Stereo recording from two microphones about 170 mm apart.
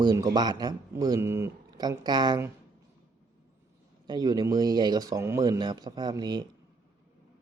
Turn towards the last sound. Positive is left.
turn(degrees=-25)  # may be behind; listen again after turning